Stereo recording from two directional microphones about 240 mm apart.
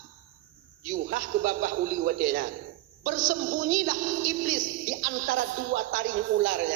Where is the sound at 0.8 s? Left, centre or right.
Right.